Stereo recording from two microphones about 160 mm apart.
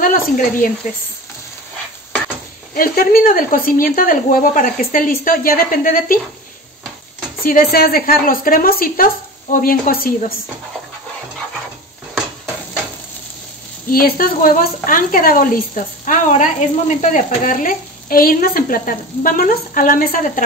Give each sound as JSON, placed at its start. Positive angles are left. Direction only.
{"t": 0.0, "sound": "a woman's voice", "side_deg": 60}
{"t": 2.7, "sound": "a woman's voice", "side_deg": 65}
{"t": 7.4, "sound": "a woman's voice", "side_deg": 65}
{"t": 13.8, "sound": "a woman's voice", "side_deg": 65}